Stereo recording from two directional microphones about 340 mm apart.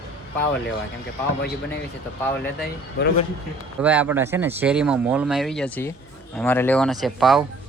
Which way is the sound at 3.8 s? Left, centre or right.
Centre.